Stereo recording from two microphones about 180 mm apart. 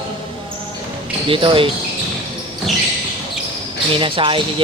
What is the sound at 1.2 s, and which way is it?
Speech, 30° right (ahead or behind).